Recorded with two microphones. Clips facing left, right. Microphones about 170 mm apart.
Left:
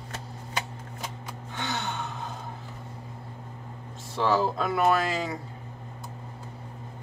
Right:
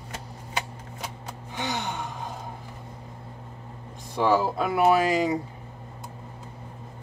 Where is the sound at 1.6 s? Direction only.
15° right (ahead or behind).